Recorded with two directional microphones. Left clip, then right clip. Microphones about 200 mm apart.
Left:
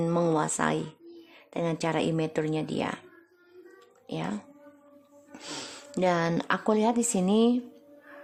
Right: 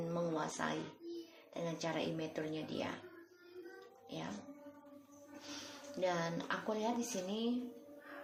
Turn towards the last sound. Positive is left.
turn(degrees=50)  # may be behind; listen again after turning